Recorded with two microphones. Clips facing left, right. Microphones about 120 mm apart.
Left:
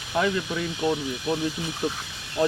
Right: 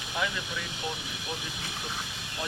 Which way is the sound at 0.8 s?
40° left (ahead or behind).